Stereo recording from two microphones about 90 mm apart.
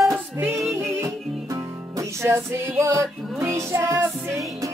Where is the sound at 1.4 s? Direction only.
40° right (ahead or behind).